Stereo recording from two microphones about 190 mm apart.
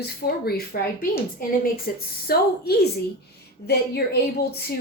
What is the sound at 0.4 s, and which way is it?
A woman's voice, 55° left (ahead or behind).